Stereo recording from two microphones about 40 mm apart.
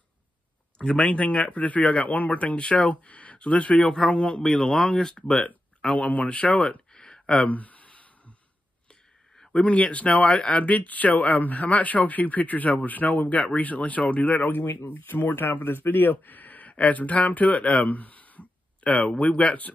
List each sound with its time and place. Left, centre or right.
0.7 s speech: left
1.5 s speech: left
3.8 s a man's voice: centre
4.1 s speech: left
4.4 s a man's voice: centre
5.8 s a sound: left
6.0 s speech: left
6.9 s a sound: centre
7.2 s a sound: left
9.5 s speech: left
10.6 s speech: left
15.0 s speech: left